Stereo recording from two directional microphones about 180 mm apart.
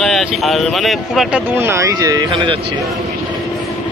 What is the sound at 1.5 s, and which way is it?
Speech, 15° right (ahead or behind).